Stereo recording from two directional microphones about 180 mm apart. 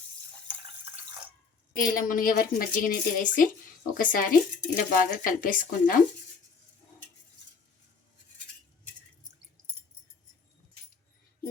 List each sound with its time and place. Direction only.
1.7 s speech: 50° left (ahead or behind)